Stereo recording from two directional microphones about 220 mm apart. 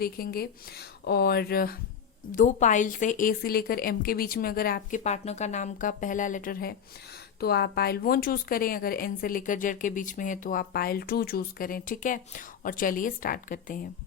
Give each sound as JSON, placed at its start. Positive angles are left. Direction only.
{"t": 0.0, "sound": "a woman's voice", "side_deg": 45}